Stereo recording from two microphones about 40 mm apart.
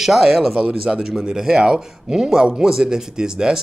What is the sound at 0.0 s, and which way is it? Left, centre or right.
Speech, centre.